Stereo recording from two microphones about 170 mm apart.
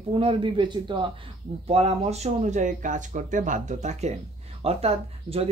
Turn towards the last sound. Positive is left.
turn(degrees=-35)  # may be behind; listen again after turning